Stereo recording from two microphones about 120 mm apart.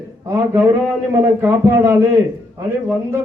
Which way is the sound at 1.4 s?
20° right (ahead or behind).